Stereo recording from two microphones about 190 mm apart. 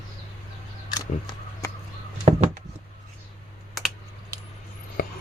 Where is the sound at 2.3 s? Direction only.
35° right (ahead or behind).